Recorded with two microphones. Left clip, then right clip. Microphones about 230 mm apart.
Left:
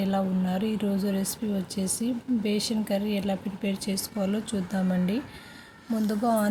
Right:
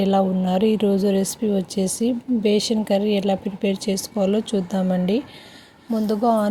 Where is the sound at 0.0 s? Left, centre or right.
Right.